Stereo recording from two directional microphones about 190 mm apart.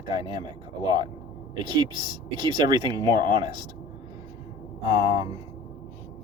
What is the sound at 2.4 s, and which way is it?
Speech, 20° right (ahead or behind).